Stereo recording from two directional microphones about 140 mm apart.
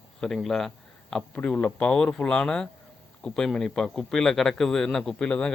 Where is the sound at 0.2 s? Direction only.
5° left (ahead or behind).